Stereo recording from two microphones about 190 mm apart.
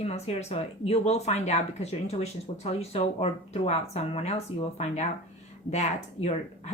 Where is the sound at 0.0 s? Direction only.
35° left (ahead or behind).